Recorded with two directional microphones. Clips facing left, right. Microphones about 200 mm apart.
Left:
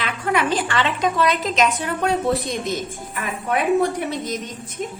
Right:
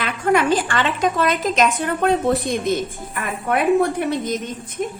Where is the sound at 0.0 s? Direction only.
45° right (ahead or behind).